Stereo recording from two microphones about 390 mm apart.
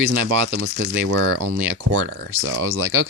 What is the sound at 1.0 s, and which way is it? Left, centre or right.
Speech, right.